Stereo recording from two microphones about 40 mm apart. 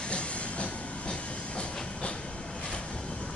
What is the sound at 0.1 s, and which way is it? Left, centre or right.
Train, left.